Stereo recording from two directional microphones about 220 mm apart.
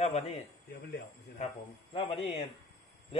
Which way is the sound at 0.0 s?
30° left (ahead or behind).